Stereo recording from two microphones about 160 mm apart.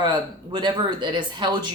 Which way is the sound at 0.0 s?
25° right (ahead or behind).